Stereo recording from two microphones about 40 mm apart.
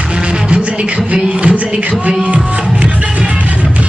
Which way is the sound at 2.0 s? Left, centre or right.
Right.